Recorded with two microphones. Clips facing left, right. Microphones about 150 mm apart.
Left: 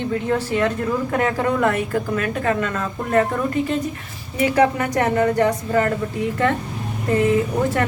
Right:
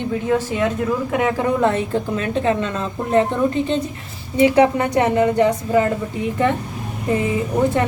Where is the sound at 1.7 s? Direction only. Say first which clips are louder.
Right 1 dB; 25° right (ahead or behind).